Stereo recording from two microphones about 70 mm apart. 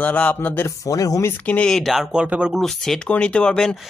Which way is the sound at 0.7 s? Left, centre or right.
Left.